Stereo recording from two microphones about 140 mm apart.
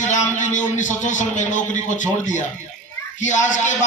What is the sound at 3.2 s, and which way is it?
Speech, 60° left (ahead or behind).